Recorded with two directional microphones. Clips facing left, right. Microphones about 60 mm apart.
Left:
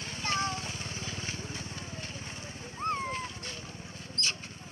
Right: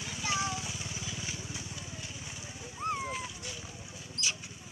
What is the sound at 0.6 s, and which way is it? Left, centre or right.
Vehicle, left.